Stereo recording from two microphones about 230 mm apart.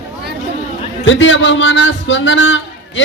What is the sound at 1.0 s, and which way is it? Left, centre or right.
A man's voice, left.